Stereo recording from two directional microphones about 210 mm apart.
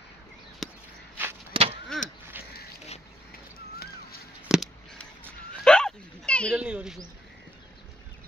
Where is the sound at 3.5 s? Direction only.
45° left (ahead or behind).